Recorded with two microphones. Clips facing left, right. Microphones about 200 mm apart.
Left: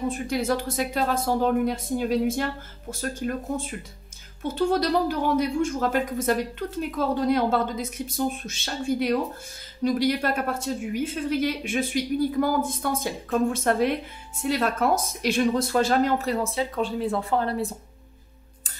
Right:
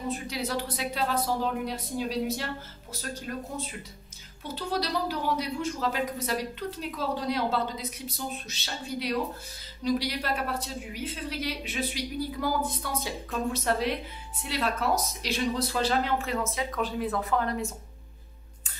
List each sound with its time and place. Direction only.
0.1 s a woman's voice: 50° left (ahead or behind); by 17.7 s 35° left (ahead or behind)